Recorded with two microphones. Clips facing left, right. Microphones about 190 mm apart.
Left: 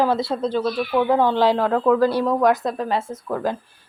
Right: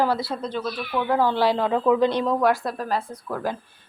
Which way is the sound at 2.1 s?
10° left (ahead or behind).